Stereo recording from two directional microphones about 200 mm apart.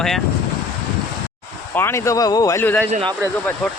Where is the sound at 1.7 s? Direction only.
10° left (ahead or behind).